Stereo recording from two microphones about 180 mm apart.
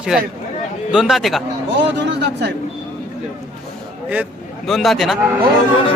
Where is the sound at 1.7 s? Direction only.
80° right.